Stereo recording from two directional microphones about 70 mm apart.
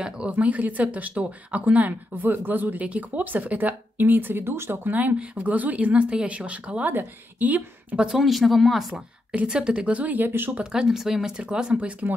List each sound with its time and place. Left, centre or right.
0.0 s speech: centre
8.1 s speech: centre
9.3 s speech: centre; by 10.6 s right
10.6 s speech: centre